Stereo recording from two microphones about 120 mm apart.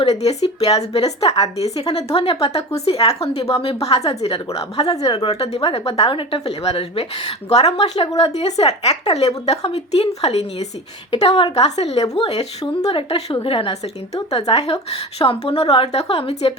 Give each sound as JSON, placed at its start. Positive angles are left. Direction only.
{"t": 0.0, "sound": "a woman's voice", "side_deg": 60}